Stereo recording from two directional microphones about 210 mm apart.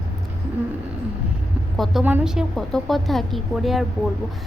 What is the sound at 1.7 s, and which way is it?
A woman's voice, centre (ahead or behind).